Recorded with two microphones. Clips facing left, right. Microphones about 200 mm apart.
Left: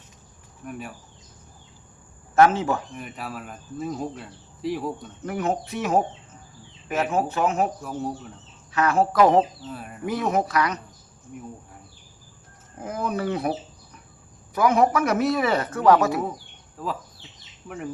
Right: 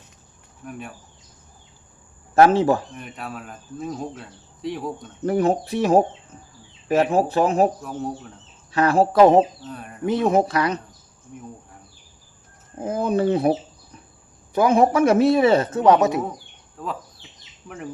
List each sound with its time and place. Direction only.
0.6 s speech: centre (ahead or behind)
2.3 s speech: 35° right (ahead or behind)
2.9 s speech: centre (ahead or behind)
5.2 s speech: 35° right (ahead or behind)
7.8 s speech: centre (ahead or behind)
8.7 s a man's voice: 30° right (ahead or behind)
9.6 s speech: 5° left (ahead or behind)
10.1 s a man's voice: 25° right (ahead or behind)
12.8 s a man's voice: 25° right (ahead or behind)
16.8 s speech: centre (ahead or behind)